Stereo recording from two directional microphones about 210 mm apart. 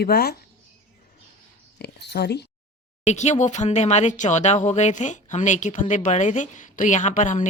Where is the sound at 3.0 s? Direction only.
35° left (ahead or behind).